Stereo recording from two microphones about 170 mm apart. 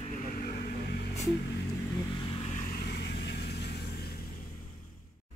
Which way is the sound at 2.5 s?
45° left (ahead or behind).